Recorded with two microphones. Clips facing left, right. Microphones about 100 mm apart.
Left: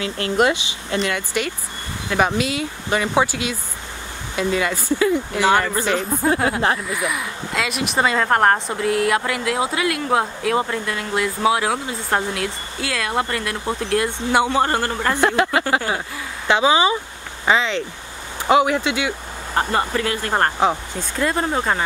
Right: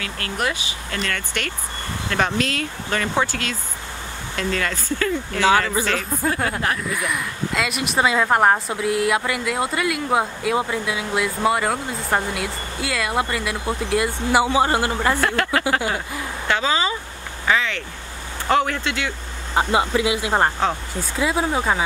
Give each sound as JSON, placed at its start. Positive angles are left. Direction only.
{"t": 0.0, "sound": "speech", "side_deg": 25}
{"t": 6.9, "sound": "speech", "side_deg": 0}
{"t": 15.1, "sound": "speech", "side_deg": 20}
{"t": 19.5, "sound": "speech", "side_deg": -10}